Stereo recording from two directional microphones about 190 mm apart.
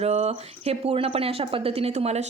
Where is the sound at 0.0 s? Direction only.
35° right (ahead or behind).